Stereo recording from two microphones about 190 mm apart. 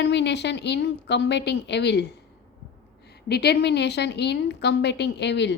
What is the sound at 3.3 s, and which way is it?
A woman's voice, 60° left (ahead or behind).